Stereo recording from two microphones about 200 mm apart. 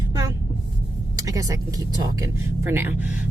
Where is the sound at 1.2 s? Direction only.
15° right (ahead or behind).